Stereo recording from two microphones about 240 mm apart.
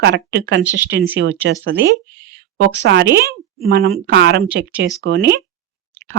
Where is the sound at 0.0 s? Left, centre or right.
Right.